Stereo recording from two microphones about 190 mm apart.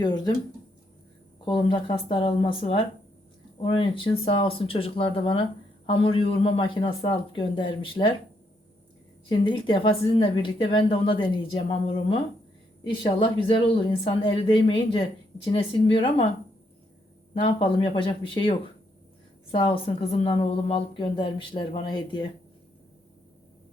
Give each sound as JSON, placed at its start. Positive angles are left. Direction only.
{"t": 0.0, "sound": "speech", "side_deg": 20}
{"t": 1.5, "sound": "speech", "side_deg": 25}
{"t": 9.4, "sound": "speech", "side_deg": 25}
{"t": 17.3, "sound": "speech", "side_deg": 25}